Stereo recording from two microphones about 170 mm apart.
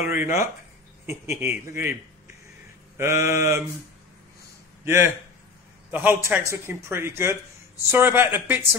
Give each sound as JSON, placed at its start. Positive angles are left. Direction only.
{"t": 0.0, "sound": "speech", "side_deg": -15}
{"t": 4.8, "sound": "speech", "side_deg": -15}